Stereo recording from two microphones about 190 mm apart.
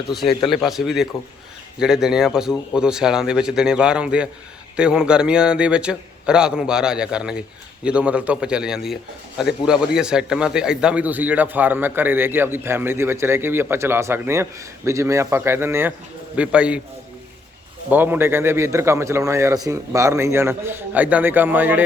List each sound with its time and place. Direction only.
0.4 s a man's voice: centre (ahead or behind)
17.9 s a man's voice: 10° right (ahead or behind)